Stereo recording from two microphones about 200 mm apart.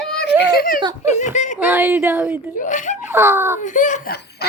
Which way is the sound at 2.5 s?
40° left (ahead or behind).